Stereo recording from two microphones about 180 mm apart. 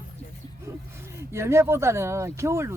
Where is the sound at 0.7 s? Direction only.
15° right (ahead or behind).